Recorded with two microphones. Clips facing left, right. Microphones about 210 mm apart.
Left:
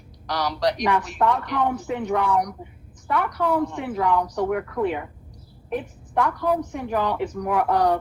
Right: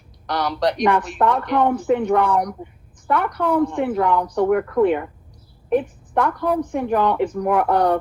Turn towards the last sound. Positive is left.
turn(degrees=-55)  # may be behind; listen again after turning